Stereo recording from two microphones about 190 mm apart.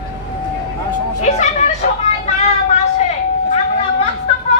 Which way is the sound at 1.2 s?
35° left (ahead or behind).